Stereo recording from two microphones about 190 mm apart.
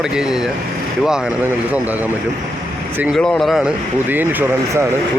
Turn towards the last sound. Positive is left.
turn(degrees=0)  # may be behind; listen again after turning